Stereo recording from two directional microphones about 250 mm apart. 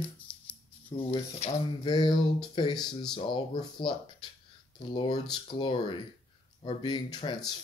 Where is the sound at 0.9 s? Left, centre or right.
Left.